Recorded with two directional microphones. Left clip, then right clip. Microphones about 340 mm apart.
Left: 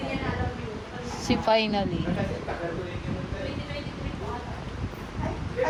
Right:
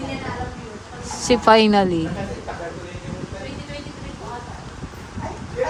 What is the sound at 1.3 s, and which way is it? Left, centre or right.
Speech, right.